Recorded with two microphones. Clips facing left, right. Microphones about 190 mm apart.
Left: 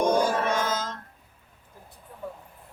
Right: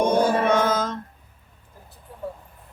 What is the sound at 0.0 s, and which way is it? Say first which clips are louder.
Music: right 3 dB; 60° right (ahead or behind).